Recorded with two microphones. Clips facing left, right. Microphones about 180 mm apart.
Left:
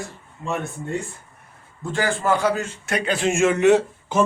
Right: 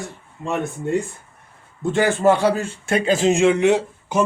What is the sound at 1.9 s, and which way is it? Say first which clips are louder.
A man's voice: right 5 dB; 20° right (ahead or behind).